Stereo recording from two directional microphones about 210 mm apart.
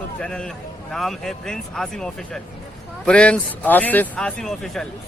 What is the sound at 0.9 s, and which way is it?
A man's voice, centre (ahead or behind).